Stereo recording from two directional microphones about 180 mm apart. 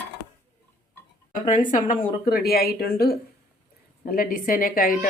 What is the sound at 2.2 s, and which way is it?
Speech, 55° left (ahead or behind).